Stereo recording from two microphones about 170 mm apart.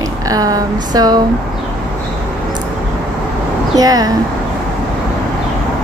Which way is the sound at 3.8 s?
20° right (ahead or behind).